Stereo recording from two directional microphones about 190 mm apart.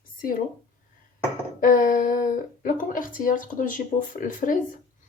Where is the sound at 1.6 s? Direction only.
45° left (ahead or behind).